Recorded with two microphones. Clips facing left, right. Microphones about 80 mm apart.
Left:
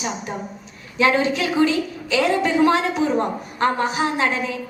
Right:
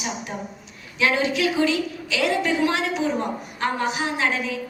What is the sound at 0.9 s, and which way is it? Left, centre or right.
A woman's voice, left.